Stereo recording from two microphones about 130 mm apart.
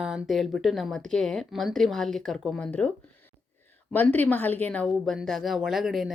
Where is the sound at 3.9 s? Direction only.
15° left (ahead or behind).